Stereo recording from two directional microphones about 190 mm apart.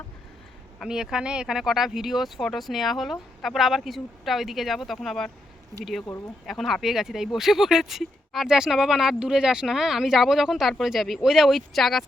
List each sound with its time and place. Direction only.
0.8 s speech: 5° right (ahead or behind)